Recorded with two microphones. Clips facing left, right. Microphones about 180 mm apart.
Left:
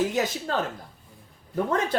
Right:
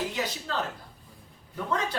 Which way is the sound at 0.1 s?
45° left (ahead or behind).